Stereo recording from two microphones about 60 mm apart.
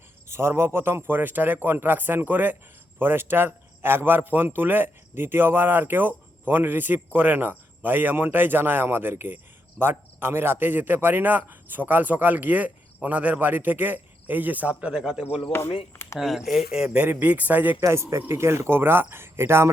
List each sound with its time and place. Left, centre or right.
0.3 s speech: right; by 15.4 s centre
15.5 s speech: left
16.1 s speech: centre
16.7 s speech: centre
17.1 s speech: right
17.7 s speech: right